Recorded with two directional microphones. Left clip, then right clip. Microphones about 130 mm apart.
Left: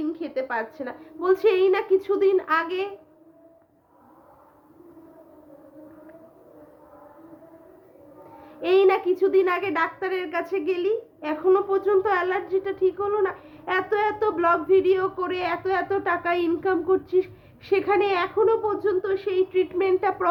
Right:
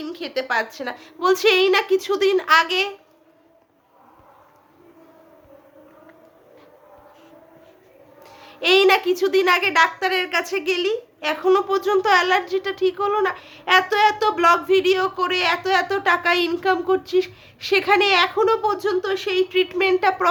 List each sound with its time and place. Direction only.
0.0 s a woman's voice: 15° right (ahead or behind)
8.4 s a woman's voice: 15° right (ahead or behind)